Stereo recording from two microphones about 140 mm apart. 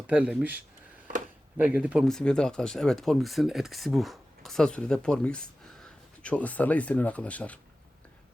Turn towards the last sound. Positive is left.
turn(degrees=10)  # may be behind; listen again after turning